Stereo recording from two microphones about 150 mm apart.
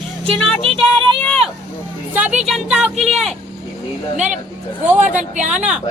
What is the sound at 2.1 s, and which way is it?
Speech, 10° right (ahead or behind).